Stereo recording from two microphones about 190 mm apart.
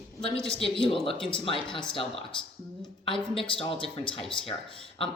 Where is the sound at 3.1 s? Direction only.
25° left (ahead or behind).